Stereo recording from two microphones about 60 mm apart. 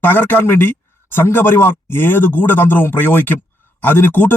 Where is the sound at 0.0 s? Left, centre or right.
Left.